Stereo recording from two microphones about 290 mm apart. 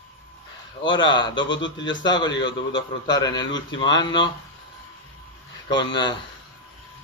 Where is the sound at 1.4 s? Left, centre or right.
Left.